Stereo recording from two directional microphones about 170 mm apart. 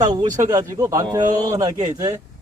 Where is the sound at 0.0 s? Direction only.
25° right (ahead or behind).